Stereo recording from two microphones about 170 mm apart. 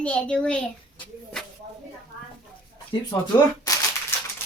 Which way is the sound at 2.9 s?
30° left (ahead or behind).